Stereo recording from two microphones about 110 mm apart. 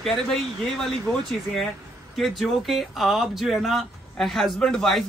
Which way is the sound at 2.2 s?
Centre (ahead or behind).